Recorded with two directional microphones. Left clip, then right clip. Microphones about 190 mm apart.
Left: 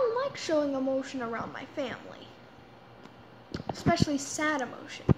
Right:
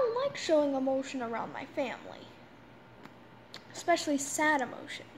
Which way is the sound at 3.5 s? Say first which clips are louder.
Left 1 dB; centre (ahead or behind).